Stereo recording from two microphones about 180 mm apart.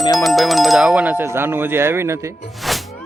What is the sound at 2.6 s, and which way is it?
Music, centre (ahead or behind).